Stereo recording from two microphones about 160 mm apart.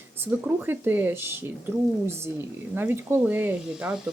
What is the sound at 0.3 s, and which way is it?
Speech, 10° right (ahead or behind).